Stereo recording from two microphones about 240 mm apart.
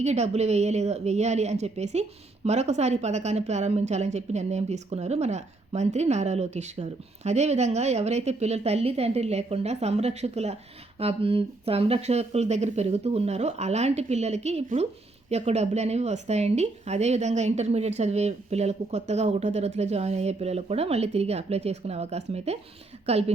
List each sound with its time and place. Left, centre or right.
0.0 s a woman's voice: right